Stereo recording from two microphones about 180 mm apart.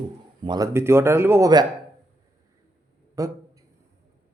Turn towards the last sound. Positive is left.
turn(degrees=-20)  # may be behind; listen again after turning